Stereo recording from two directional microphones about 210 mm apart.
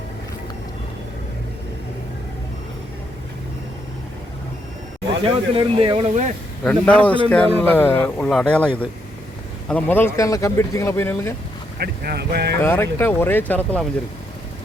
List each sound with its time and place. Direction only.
5.2 s speech: 25° right (ahead or behind)
6.7 s speech: 5° left (ahead or behind)
11.8 s speech: 50° right (ahead or behind)
12.6 s speech: 10° left (ahead or behind)